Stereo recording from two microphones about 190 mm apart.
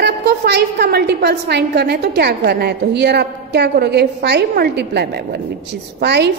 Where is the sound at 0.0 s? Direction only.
60° right (ahead or behind).